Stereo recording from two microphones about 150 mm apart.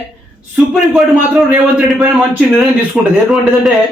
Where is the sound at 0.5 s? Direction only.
Centre (ahead or behind).